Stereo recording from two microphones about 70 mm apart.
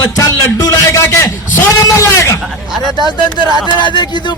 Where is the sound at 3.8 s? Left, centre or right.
Left.